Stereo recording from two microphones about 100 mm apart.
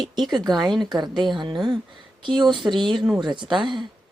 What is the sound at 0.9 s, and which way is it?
Speech, 45° right (ahead or behind).